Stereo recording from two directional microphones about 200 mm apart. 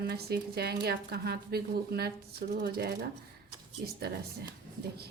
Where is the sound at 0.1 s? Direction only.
50° right (ahead or behind).